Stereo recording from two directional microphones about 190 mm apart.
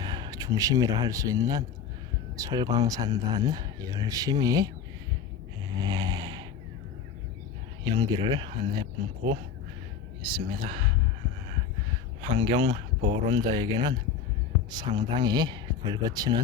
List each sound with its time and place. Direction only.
0.0 s speech: 20° right (ahead or behind)
5.8 s vehicle: 20° right (ahead or behind)
7.9 s speech: 25° right (ahead or behind)
12.3 s speech: 25° right (ahead or behind)